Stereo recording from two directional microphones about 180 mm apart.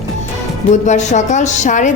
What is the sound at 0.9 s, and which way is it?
A woman's voice, 40° left (ahead or behind).